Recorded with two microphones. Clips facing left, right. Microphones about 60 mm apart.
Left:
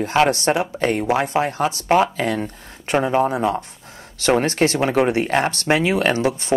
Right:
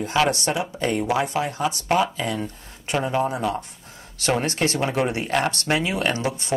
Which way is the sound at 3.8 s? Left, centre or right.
Left.